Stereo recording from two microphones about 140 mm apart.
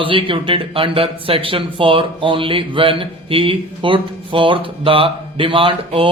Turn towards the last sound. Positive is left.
turn(degrees=-40)  # may be behind; listen again after turning